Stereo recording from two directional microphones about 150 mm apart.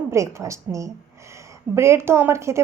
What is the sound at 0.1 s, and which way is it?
A woman's voice, 20° right (ahead or behind).